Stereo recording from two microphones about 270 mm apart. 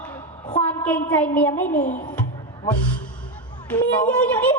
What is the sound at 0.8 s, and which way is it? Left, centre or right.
Speech, centre.